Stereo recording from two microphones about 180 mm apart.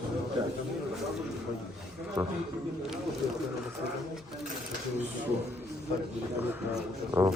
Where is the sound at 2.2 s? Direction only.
20° right (ahead or behind).